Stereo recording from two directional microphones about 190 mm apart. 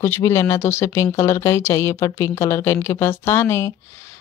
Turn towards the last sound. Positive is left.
turn(degrees=15)  # may be behind; listen again after turning